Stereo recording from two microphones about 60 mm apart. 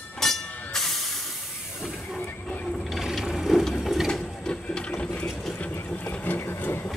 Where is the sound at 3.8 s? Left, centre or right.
Centre.